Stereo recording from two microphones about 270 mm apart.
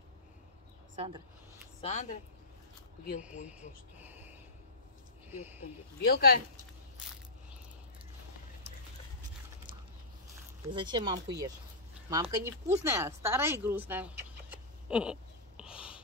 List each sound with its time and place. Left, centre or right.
0.9 s speech: centre
1.8 s speech: left
4.0 s a sound: centre
5.3 s speech: centre
5.6 s speech: left
10.7 s speech: centre